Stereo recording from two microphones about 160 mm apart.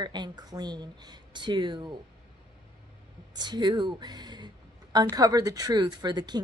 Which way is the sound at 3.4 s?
25° right (ahead or behind).